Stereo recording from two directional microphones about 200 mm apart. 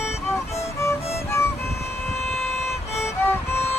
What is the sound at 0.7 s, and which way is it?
Music, 15° left (ahead or behind).